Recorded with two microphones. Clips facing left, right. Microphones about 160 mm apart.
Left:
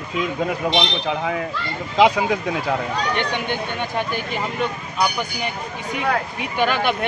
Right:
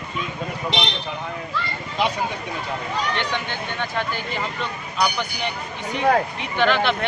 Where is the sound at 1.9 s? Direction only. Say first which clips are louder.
Left 8 dB; 90° left.